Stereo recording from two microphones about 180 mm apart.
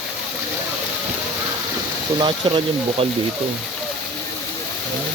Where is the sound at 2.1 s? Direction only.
25° right (ahead or behind).